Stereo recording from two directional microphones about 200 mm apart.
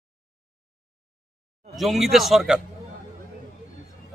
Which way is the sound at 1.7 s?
Centre (ahead or behind).